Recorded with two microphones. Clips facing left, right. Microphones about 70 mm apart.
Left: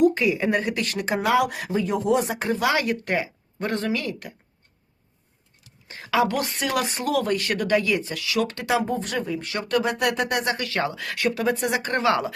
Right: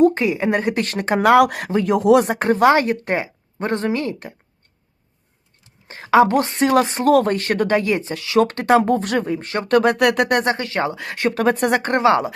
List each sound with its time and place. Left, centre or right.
0.0 s a woman's voice: right
0.9 s speech: right
5.6 s a woman's voice: right
8.4 s speech: right
10.4 s speech: right
11.3 s speech: right
11.9 s speech: right